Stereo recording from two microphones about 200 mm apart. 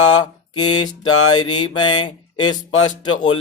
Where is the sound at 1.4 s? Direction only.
20° left (ahead or behind).